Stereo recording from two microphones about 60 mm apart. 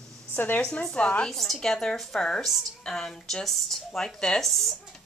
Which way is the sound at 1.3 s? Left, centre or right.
Centre.